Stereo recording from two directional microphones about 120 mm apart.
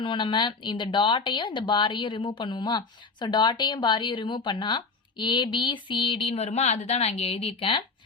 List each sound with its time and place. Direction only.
0.0 s speech: 40° left (ahead or behind)
6.3 s a woman's voice: 70° left (ahead or behind); by 7.9 s 45° left (ahead or behind)